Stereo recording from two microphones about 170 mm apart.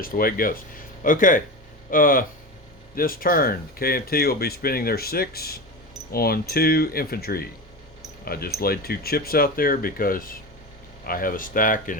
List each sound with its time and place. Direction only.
0.0 s speech: 55° left (ahead or behind)